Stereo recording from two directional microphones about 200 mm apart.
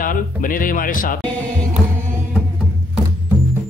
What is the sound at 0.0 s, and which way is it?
Speech, 45° left (ahead or behind).